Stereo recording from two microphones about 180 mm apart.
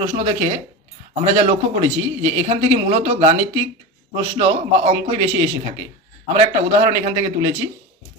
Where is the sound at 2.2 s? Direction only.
35° right (ahead or behind).